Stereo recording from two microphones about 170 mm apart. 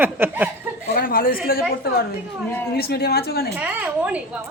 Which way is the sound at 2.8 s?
70° left (ahead or behind).